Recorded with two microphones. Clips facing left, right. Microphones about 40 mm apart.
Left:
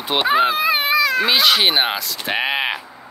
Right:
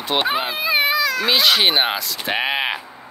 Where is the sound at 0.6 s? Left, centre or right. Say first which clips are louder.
Left 1 dB; left.